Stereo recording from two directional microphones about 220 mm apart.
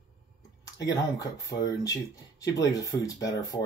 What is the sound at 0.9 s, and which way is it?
Speech, 15° left (ahead or behind).